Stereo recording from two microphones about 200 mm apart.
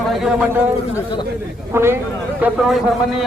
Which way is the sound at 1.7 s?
10° right (ahead or behind).